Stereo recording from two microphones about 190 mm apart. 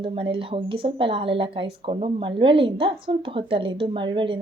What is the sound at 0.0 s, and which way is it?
A woman's voice, 30° right (ahead or behind).